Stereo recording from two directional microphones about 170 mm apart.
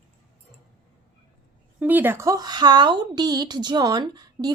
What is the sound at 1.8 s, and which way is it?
A woman's voice, 10° right (ahead or behind).